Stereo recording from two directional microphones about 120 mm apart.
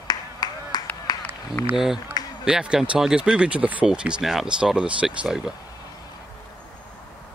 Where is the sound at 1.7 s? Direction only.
5° right (ahead or behind).